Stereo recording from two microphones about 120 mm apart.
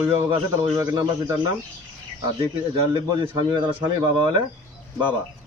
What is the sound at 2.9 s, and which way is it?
Speech, 40° right (ahead or behind).